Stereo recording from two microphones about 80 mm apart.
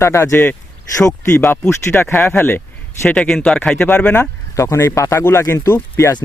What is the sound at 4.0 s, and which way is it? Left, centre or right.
Speech, left.